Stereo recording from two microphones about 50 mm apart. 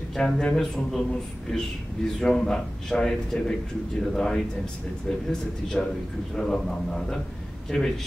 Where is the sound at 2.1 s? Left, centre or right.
Centre.